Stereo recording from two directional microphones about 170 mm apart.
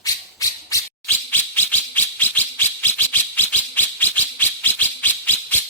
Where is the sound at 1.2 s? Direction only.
10° left (ahead or behind).